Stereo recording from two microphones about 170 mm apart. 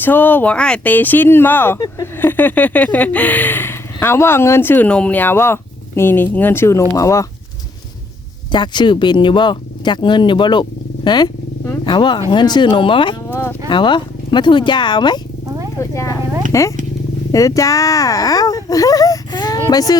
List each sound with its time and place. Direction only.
0.0 s speech: 10° left (ahead or behind)
8.5 s speech: 25° left (ahead or behind)
13.2 s speech: 15° left (ahead or behind)
13.7 s speech: 25° left (ahead or behind)